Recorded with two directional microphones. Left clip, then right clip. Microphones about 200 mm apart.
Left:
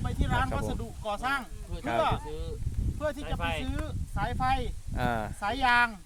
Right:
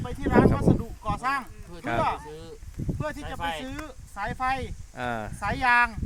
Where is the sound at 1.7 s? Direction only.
15° right (ahead or behind).